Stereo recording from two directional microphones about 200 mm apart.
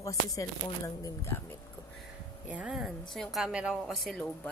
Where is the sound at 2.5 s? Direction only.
5° right (ahead or behind).